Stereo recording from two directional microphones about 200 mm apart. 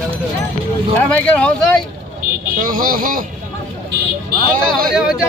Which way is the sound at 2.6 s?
45° right (ahead or behind).